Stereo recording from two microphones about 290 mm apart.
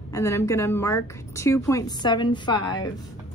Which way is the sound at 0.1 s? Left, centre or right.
Centre.